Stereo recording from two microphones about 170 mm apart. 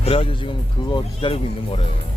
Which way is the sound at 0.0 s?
35° left (ahead or behind).